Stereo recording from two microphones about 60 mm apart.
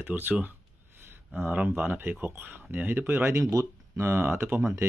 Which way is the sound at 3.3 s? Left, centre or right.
Right.